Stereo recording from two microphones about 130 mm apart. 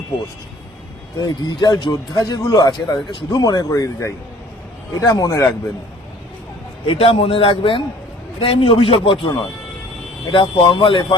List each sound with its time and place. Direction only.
1.2 s speech: 30° left (ahead or behind)
6.8 s a man's voice: 45° left (ahead or behind)
10.3 s speech: 40° left (ahead or behind)